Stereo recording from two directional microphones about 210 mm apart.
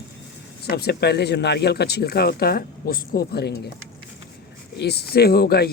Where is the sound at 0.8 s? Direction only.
50° left (ahead or behind).